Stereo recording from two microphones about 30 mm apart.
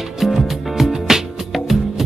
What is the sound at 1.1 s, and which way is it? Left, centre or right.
Music, centre.